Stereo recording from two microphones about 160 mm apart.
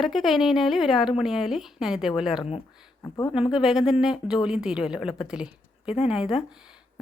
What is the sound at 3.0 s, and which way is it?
Speech, 20° left (ahead or behind).